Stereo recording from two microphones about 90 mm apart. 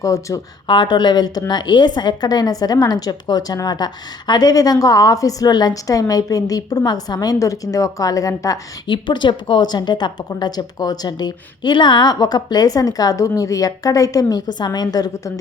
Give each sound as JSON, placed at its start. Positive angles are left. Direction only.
{"t": 0.0, "sound": "speech", "side_deg": 35}
{"t": 0.7, "sound": "a woman's voice", "side_deg": 60}
{"t": 8.9, "sound": "a woman's voice", "side_deg": 60}